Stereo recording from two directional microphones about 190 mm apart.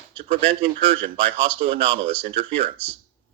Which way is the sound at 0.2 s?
30° right (ahead or behind).